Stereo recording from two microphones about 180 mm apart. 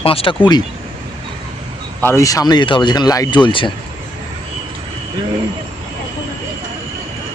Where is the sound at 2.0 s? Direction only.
15° left (ahead or behind).